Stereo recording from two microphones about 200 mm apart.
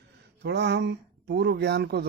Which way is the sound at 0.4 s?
60° right (ahead or behind).